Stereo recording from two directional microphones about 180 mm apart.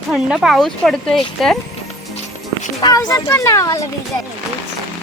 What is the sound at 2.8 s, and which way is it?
A child's voice, 20° left (ahead or behind).